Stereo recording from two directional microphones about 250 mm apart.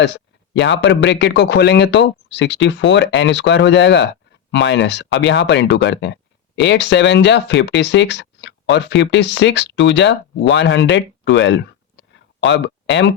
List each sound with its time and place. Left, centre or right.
0.0 s speech: left